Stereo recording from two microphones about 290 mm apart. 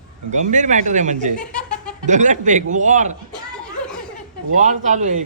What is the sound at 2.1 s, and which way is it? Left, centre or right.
Speech, right.